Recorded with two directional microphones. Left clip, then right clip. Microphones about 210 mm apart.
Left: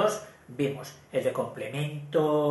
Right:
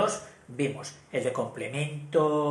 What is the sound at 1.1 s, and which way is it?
Speech, 30° right (ahead or behind).